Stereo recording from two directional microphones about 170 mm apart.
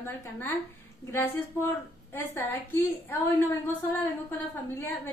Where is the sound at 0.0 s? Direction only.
15° left (ahead or behind).